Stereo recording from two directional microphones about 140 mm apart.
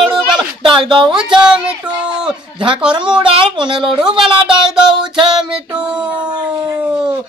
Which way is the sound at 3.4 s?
35° right (ahead or behind).